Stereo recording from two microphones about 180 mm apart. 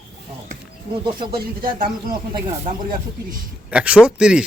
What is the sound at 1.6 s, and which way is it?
Speech, 55° right (ahead or behind).